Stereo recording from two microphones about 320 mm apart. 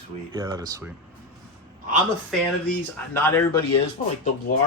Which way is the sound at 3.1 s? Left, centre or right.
Centre.